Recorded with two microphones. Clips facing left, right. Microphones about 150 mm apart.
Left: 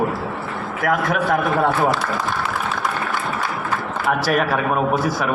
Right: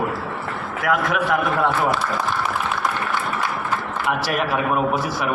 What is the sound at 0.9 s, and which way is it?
Speech, 40° left (ahead or behind).